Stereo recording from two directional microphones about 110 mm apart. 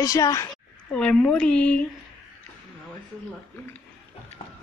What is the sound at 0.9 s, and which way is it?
Speech, 10° left (ahead or behind).